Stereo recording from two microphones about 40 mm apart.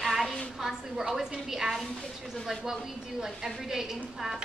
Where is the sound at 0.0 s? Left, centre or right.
Centre.